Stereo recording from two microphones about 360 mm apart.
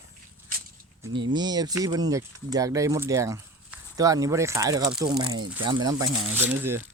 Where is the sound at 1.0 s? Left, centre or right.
Centre.